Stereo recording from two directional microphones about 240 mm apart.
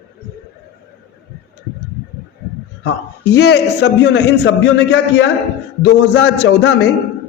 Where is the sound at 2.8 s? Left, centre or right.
Left.